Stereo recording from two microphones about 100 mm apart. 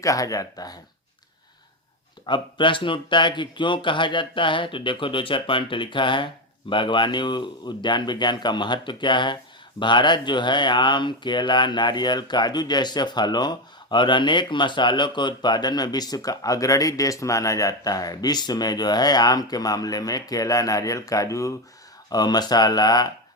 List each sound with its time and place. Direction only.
0.0 s speech: 35° left (ahead or behind)
2.2 s speech: 55° left (ahead or behind)